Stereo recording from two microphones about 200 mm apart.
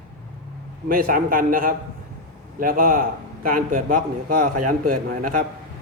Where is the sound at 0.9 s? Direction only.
45° right (ahead or behind).